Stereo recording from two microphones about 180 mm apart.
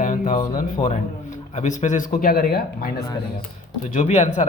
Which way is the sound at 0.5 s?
40° left (ahead or behind).